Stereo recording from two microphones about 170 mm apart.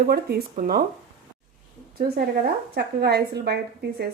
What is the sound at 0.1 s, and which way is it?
Speech, 65° right (ahead or behind).